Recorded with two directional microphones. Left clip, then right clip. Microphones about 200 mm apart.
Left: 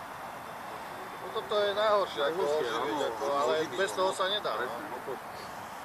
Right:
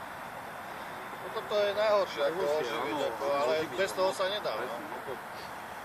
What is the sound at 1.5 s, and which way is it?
Speech, 40° right (ahead or behind).